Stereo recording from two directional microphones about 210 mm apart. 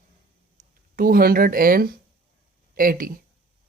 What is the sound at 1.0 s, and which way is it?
Speech, 45° right (ahead or behind).